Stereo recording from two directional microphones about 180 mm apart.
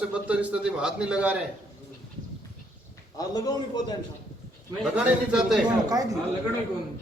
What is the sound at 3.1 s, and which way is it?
Speech, 20° left (ahead or behind).